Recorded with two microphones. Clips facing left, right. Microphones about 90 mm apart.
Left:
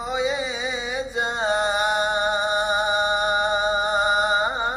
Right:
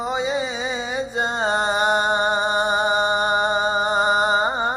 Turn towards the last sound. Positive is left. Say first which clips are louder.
# right 2 dB
turn(degrees=-35)  # may be behind; listen again after turning